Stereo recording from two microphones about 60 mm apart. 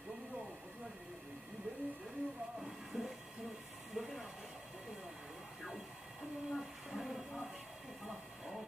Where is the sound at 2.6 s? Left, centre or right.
Centre.